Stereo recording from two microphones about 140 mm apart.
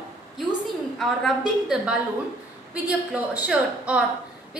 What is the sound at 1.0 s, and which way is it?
A woman's voice, centre (ahead or behind).